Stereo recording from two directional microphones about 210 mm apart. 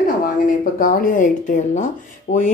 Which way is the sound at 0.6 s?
40° left (ahead or behind).